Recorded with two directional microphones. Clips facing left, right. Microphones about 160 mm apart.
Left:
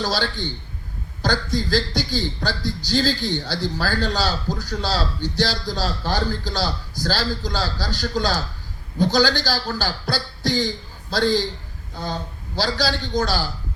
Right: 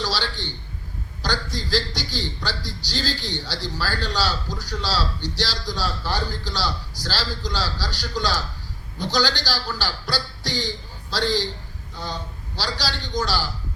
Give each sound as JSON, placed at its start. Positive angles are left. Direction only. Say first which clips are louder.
{"t": 0.0, "sound": "a man's voice", "louder": "left 3 dB", "side_deg": 50}